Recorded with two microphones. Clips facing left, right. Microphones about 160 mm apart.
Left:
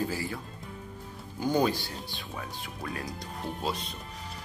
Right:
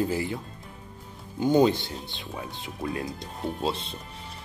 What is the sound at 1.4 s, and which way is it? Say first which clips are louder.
Speech: right 6 dB; 20° right (ahead or behind).